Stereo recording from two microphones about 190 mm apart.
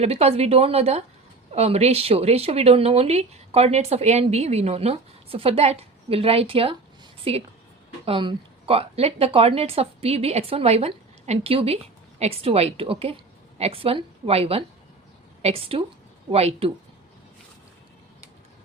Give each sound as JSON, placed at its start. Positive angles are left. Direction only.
{"t": 0.0, "sound": "a woman's voice", "side_deg": -35}